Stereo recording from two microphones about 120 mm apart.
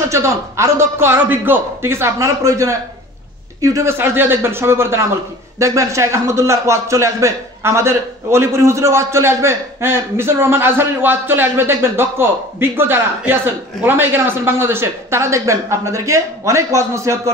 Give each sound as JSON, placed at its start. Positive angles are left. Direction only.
{"t": 0.1, "sound": "a man's voice", "side_deg": -25}